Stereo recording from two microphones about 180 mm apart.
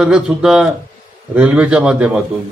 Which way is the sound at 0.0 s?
5° right (ahead or behind).